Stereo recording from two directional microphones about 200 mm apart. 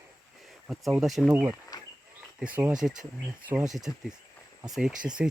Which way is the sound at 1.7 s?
20° left (ahead or behind).